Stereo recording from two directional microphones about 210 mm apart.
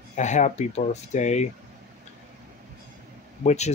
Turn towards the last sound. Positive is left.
turn(degrees=35)  # may be behind; listen again after turning